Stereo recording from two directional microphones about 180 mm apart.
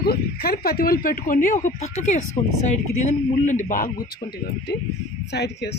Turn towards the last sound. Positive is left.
turn(degrees=65)  # may be behind; listen again after turning